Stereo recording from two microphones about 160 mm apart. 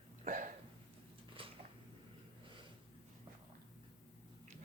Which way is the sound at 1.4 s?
35° right (ahead or behind).